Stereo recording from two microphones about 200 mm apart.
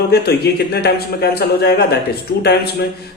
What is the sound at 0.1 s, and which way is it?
Speech, 55° left (ahead or behind).